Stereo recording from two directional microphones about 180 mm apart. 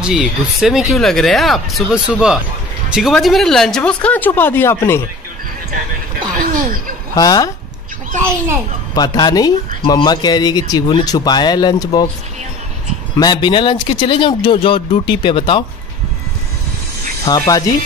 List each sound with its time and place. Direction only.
0.0 s speech: 5° right (ahead or behind); by 5.0 s 15° left (ahead or behind)
6.3 s a sound: 50° right (ahead or behind)
7.2 s speech: 20° left (ahead or behind)
8.9 s speech: 20° left (ahead or behind)
13.2 s speech: 25° left (ahead or behind)
17.2 s speech: 20° left (ahead or behind)